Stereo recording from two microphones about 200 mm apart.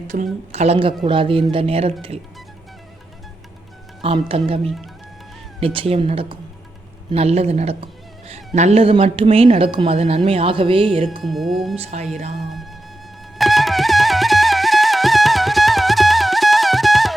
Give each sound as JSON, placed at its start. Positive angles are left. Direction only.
{"t": 0.1, "sound": "speech", "side_deg": -35}
{"t": 4.0, "sound": "speech", "side_deg": -30}
{"t": 11.2, "sound": "speech", "side_deg": 0}
{"t": 11.8, "sound": "speech", "side_deg": -35}
{"t": 12.4, "sound": "speech", "side_deg": 0}
{"t": 13.4, "sound": "music", "side_deg": 0}